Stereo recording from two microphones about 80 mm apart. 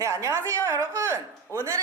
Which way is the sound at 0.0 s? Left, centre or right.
Right.